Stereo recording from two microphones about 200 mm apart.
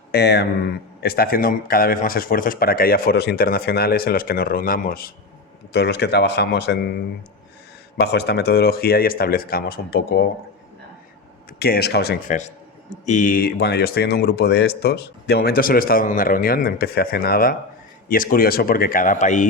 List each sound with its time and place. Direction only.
0.1 s a man's voice: 55° left (ahead or behind)
11.6 s speech: 55° left (ahead or behind)
12.3 s a man's voice: 35° left (ahead or behind)